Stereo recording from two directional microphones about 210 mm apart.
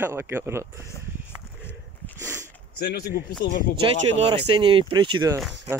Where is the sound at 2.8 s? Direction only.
45° left (ahead or behind).